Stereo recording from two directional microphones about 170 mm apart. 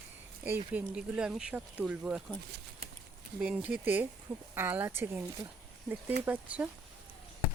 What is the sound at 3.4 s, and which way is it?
Speech, 5° right (ahead or behind).